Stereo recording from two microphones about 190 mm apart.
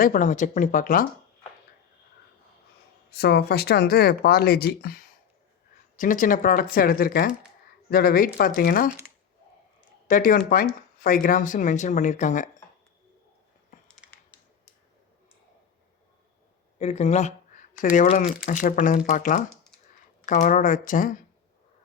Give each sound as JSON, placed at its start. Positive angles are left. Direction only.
{"t": 0.0, "sound": "speech", "side_deg": 45}
{"t": 3.1, "sound": "speech", "side_deg": 60}
{"t": 10.1, "sound": "speech", "side_deg": 45}
{"t": 13.8, "sound": "a sound", "side_deg": 5}
{"t": 16.7, "sound": "speech", "side_deg": 35}